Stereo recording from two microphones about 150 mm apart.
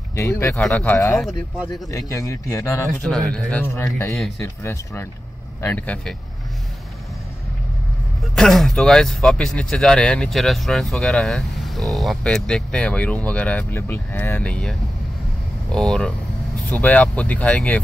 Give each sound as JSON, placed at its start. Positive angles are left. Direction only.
{"t": 0.1, "sound": "speech", "side_deg": 15}
{"t": 0.6, "sound": "speech", "side_deg": 5}
{"t": 0.9, "sound": "speech", "side_deg": 20}
{"t": 3.0, "sound": "speech", "side_deg": 5}
{"t": 8.2, "sound": "speech", "side_deg": 0}